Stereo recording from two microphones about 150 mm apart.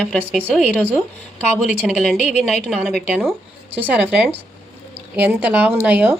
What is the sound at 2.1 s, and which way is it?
Speech, 50° left (ahead or behind).